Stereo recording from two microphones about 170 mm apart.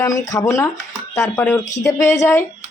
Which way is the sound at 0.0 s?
20° left (ahead or behind).